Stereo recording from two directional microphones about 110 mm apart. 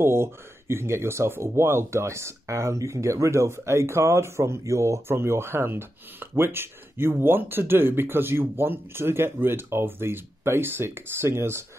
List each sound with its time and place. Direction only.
0.0 s speech: 20° right (ahead or behind)